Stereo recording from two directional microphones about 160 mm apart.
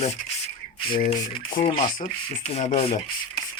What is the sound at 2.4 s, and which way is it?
Speech, 45° left (ahead or behind).